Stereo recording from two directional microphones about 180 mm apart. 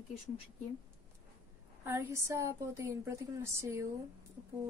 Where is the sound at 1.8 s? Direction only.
15° right (ahead or behind).